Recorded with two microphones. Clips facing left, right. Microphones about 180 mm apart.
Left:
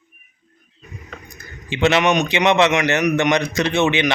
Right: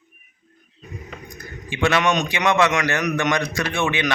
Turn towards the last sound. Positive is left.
turn(degrees=20)  # may be behind; listen again after turning